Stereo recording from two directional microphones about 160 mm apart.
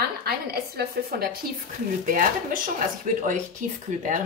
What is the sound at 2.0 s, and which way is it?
Speech, 60° right (ahead or behind).